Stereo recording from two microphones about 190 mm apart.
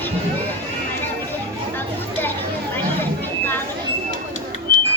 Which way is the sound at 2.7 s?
10° left (ahead or behind).